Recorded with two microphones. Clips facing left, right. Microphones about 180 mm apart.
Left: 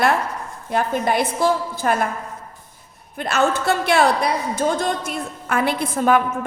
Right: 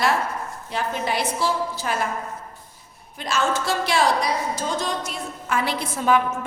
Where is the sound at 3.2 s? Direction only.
60° left (ahead or behind).